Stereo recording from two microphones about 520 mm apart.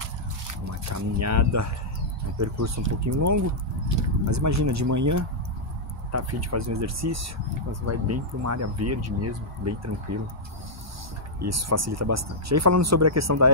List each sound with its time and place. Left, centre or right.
0.5 s speech: right
11.4 s speech: right